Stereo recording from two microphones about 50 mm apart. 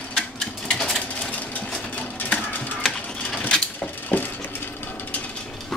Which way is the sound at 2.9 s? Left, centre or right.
Left.